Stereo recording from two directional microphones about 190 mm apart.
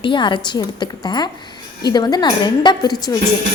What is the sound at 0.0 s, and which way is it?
A woman's voice, 25° left (ahead or behind).